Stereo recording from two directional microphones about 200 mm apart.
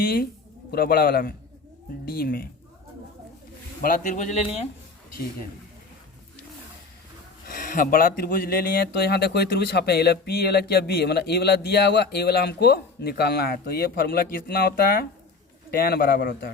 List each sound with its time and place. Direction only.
0.7 s speech: 50° left (ahead or behind)
3.8 s a man's voice: 40° left (ahead or behind)
7.4 s speech: 40° left (ahead or behind)